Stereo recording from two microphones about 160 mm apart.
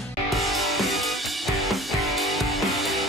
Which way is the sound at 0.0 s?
Centre (ahead or behind).